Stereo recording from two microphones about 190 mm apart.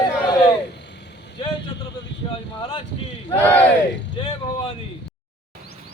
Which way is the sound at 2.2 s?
25° left (ahead or behind).